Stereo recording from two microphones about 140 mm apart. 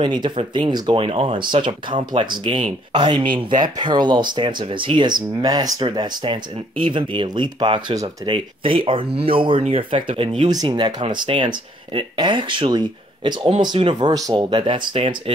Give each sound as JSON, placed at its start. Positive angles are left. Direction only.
{"t": 0.0, "sound": "speech", "side_deg": -35}